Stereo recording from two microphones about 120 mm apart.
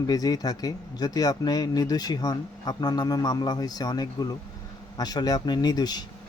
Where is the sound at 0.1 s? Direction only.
30° left (ahead or behind).